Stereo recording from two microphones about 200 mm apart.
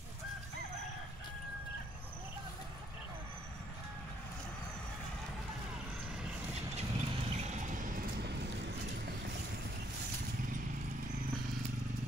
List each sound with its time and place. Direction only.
6.5 s vehicle: 30° right (ahead or behind); by 9.4 s 60° right (ahead or behind)